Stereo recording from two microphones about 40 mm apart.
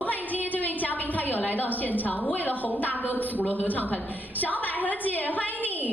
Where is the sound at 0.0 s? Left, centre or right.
Left.